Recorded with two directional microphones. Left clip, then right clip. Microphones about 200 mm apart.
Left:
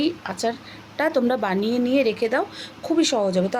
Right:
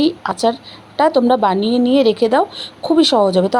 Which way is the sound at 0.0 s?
25° right (ahead or behind).